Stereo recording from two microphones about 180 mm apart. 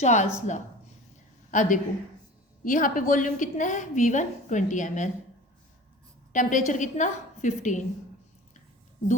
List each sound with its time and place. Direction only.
0.0 s a woman's voice: 40° left (ahead or behind)
6.3 s a woman's voice: 45° left (ahead or behind)